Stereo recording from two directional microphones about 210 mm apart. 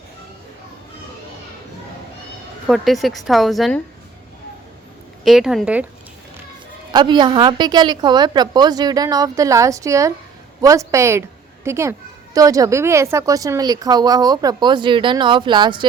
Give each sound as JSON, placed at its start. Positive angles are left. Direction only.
{"t": 2.6, "sound": "a woman's voice", "side_deg": 0}
{"t": 5.2, "sound": "a woman's voice", "side_deg": 0}
{"t": 6.9, "sound": "a woman's voice", "side_deg": -20}